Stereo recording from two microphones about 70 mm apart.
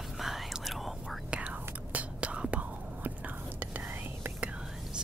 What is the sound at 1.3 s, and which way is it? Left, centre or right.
Whispering, centre.